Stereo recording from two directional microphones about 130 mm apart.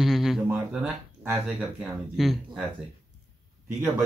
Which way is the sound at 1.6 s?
Centre (ahead or behind).